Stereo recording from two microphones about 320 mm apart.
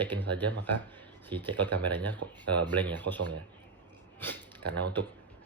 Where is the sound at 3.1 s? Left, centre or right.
Right.